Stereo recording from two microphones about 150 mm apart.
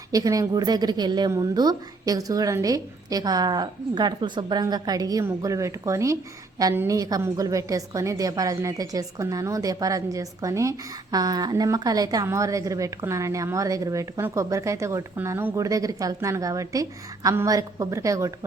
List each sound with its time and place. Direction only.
0.1 s a woman's voice: 25° right (ahead or behind)